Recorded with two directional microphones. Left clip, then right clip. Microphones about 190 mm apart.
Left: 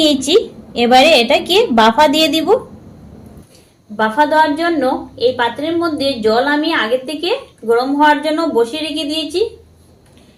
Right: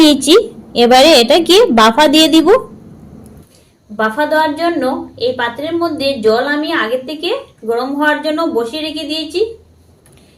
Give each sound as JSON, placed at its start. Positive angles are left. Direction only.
{"t": 0.0, "sound": "a woman's voice", "side_deg": -35}
{"t": 3.9, "sound": "a woman's voice", "side_deg": 0}